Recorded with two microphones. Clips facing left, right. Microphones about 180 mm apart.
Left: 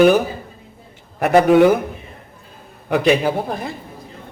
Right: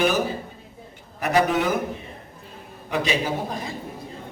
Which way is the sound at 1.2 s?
60° left (ahead or behind).